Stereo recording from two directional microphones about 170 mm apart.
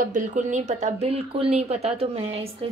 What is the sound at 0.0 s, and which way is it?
Speech, 50° right (ahead or behind).